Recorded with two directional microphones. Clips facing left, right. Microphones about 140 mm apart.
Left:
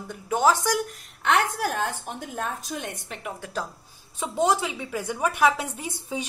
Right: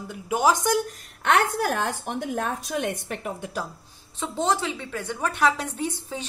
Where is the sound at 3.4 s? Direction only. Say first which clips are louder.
Even; 10° right (ahead or behind).